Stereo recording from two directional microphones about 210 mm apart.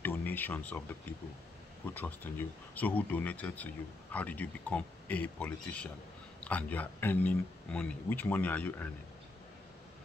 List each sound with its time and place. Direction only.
0.0 s speech: 10° left (ahead or behind)